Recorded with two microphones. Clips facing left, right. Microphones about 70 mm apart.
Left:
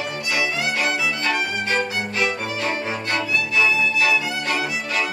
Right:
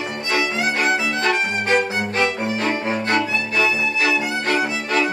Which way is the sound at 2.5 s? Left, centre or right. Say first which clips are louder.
Right 3 dB; right.